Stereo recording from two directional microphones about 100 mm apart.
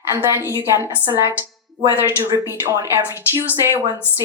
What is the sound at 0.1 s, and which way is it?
Speech, 30° right (ahead or behind).